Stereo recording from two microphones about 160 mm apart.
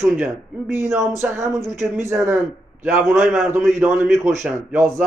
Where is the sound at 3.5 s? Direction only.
15° right (ahead or behind).